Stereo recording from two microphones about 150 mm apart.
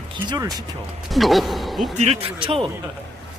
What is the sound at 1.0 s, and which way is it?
Speech, centre (ahead or behind).